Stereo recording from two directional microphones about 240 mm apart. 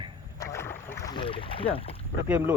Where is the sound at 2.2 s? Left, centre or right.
Centre.